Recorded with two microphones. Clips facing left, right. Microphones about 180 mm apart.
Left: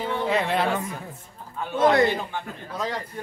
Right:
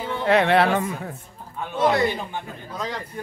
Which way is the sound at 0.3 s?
70° right (ahead or behind).